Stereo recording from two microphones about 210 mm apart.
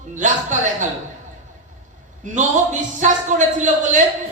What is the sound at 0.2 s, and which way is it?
Speech, 35° right (ahead or behind).